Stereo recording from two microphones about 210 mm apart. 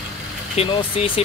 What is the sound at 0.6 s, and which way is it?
Speech, 30° left (ahead or behind).